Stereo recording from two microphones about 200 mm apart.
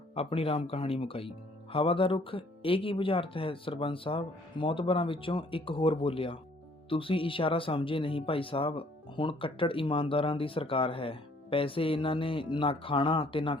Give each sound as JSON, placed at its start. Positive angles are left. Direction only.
{"t": 0.2, "sound": "speech", "side_deg": 30}